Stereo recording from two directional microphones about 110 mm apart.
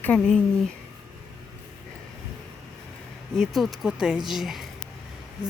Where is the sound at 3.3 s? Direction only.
Centre (ahead or behind).